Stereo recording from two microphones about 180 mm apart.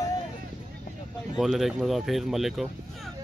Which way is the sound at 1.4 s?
Centre (ahead or behind).